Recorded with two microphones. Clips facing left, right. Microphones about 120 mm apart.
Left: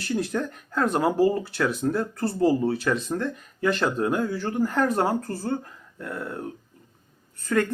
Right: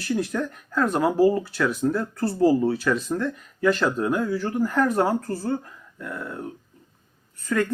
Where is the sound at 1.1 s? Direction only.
30° right (ahead or behind).